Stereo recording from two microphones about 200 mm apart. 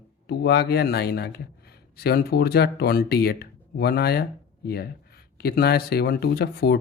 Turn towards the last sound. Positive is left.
turn(degrees=55)  # may be behind; listen again after turning